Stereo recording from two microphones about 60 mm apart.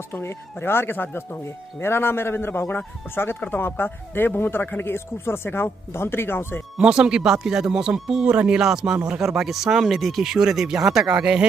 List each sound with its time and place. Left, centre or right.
0.1 s speech: left
6.8 s speech: centre